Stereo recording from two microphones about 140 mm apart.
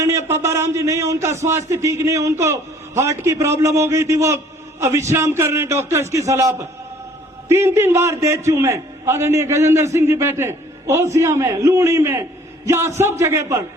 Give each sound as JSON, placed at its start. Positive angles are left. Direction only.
{"t": 0.0, "sound": "a man's voice", "side_deg": -20}